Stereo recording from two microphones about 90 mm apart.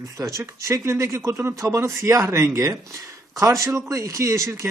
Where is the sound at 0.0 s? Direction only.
35° right (ahead or behind).